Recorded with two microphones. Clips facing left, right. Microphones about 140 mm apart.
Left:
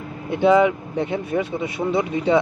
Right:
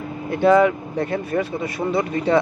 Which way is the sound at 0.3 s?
Centre (ahead or behind).